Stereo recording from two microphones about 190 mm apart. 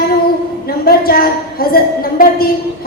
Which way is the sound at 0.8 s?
50° left (ahead or behind).